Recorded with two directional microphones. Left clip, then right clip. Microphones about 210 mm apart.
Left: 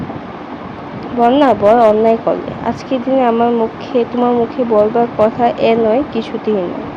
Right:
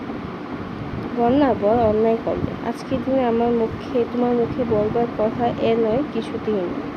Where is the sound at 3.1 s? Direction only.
10° left (ahead or behind).